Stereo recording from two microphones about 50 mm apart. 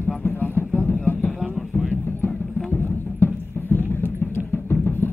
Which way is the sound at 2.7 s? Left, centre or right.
Left.